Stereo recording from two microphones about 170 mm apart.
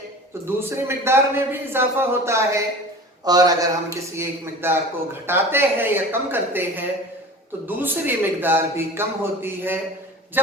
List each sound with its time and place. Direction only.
0.4 s a man's voice: 15° right (ahead or behind)